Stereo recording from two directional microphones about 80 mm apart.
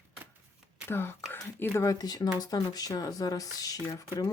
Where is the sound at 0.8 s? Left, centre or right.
Left.